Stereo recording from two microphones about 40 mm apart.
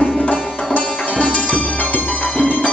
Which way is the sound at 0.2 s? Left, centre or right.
Left.